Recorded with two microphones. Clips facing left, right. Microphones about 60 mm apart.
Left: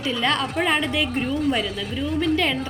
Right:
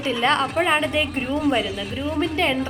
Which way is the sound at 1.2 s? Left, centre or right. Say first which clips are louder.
Right 2 dB; centre.